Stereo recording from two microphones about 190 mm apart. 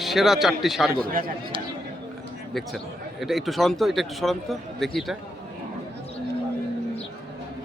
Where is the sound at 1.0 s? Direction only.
50° right (ahead or behind).